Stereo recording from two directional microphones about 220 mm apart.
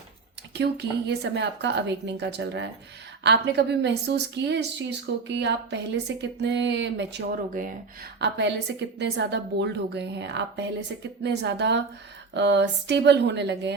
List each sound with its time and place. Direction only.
0.5 s a woman's voice: 50° right (ahead or behind)